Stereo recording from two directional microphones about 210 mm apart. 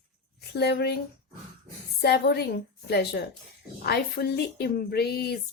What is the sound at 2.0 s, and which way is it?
Speech, 50° left (ahead or behind).